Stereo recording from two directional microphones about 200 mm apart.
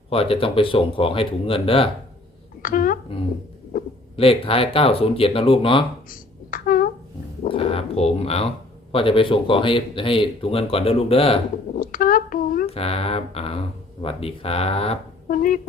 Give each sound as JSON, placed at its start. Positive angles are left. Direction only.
{"t": 0.1, "sound": "speech", "side_deg": 30}
{"t": 2.6, "sound": "speech", "side_deg": 45}
{"t": 4.2, "sound": "speech", "side_deg": 30}
{"t": 6.1, "sound": "a sound", "side_deg": 45}
{"t": 7.4, "sound": "speech", "side_deg": 30}
{"t": 11.7, "sound": "a woman's voice", "side_deg": 45}
{"t": 12.6, "sound": "speech", "side_deg": 30}
{"t": 15.3, "sound": "speech", "side_deg": 45}